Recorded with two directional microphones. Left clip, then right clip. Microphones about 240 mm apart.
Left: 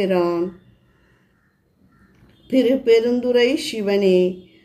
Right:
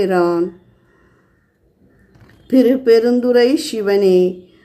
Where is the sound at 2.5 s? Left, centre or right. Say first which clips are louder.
Right 4 dB; centre.